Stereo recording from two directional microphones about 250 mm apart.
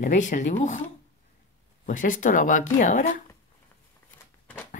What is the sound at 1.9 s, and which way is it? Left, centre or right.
Speech, left.